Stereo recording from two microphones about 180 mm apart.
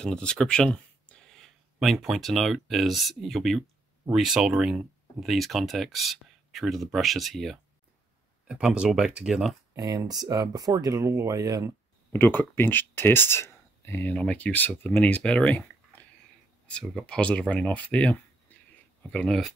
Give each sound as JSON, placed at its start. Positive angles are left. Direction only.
{"t": 0.0, "sound": "speech", "side_deg": 5}
{"t": 9.8, "sound": "speech", "side_deg": -20}
{"t": 12.1, "sound": "speech", "side_deg": 10}